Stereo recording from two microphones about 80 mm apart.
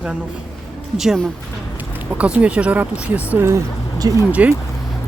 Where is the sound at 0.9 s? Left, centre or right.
Centre.